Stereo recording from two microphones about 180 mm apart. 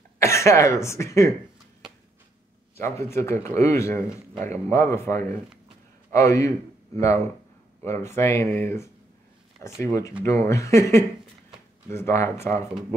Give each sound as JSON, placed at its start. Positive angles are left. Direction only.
{"t": 0.2, "sound": "speech", "side_deg": 15}
{"t": 2.8, "sound": "speech", "side_deg": 15}
{"t": 7.8, "sound": "speech", "side_deg": 15}